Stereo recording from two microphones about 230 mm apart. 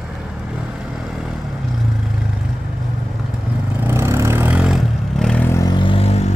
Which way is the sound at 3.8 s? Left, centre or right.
Centre.